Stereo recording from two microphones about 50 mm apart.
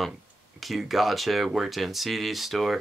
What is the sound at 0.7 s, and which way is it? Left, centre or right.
Speech, centre.